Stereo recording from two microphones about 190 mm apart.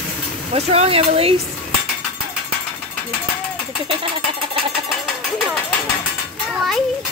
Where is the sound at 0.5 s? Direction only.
35° right (ahead or behind).